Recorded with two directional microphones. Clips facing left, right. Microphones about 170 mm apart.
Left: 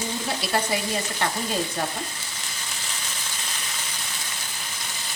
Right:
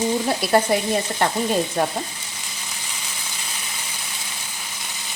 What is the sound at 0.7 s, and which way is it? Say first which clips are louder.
Speech: right 6 dB; 55° right (ahead or behind).